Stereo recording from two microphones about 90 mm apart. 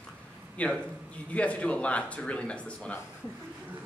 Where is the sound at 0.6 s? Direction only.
15° left (ahead or behind).